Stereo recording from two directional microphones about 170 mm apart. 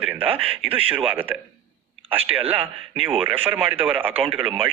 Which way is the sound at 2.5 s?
10° right (ahead or behind).